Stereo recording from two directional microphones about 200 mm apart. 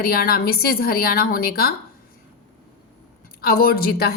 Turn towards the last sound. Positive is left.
turn(degrees=50)  # may be behind; listen again after turning